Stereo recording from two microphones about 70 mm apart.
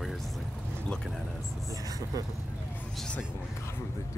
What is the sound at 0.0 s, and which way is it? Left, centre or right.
Vehicle, centre.